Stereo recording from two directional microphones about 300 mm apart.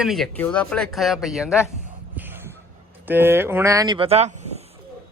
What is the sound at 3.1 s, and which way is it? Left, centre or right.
Speech, centre.